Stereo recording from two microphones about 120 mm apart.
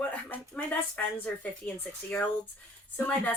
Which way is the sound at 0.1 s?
15° left (ahead or behind).